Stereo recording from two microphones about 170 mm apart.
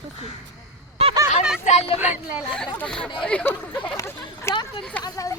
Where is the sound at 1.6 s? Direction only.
40° left (ahead or behind).